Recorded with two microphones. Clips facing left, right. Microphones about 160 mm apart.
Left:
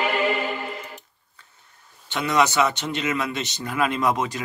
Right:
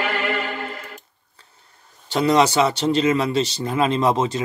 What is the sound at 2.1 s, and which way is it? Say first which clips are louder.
Speech: right 5 dB; 30° right (ahead or behind).